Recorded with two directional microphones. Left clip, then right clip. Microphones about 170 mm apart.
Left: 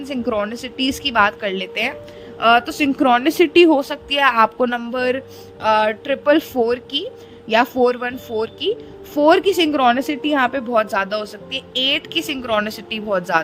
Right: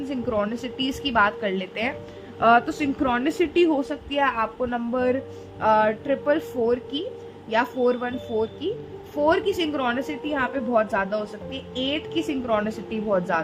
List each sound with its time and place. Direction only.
0.0 s a woman's voice: 40° left (ahead or behind)